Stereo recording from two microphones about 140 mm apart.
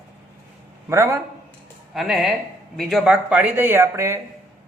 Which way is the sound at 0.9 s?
20° right (ahead or behind).